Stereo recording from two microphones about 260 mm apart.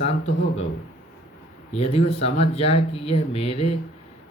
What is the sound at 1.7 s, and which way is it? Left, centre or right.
Speech, left.